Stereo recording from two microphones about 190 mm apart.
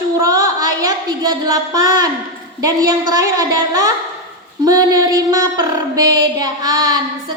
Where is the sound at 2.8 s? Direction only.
20° right (ahead or behind).